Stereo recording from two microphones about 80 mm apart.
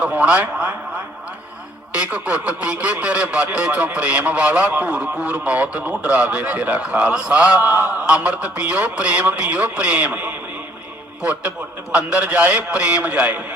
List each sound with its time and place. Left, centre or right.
0.0 s a man's voice: centre
1.9 s a man's voice: centre